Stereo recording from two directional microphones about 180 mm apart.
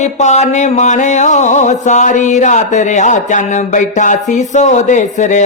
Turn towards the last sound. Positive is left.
turn(degrees=45)  # may be behind; listen again after turning